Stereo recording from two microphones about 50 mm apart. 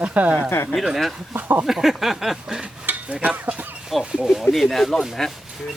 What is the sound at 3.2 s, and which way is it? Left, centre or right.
Speech, right.